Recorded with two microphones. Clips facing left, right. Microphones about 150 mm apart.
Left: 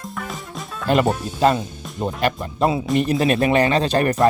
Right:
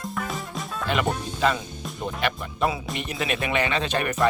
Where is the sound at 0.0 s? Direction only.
Centre (ahead or behind).